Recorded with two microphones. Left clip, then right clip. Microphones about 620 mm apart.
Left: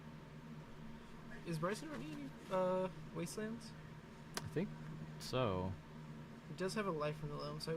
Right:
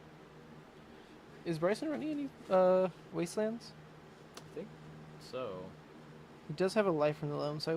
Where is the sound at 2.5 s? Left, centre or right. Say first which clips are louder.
Right 10 dB; right.